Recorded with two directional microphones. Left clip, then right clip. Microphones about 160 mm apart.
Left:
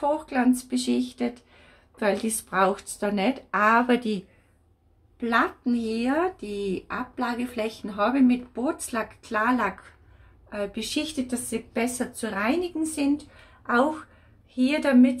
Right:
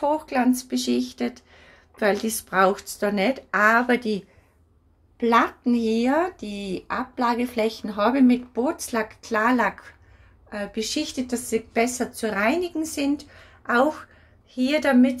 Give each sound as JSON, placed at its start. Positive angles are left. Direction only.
{"t": 0.0, "sound": "speech", "side_deg": -5}
{"t": 5.2, "sound": "a woman's voice", "side_deg": -20}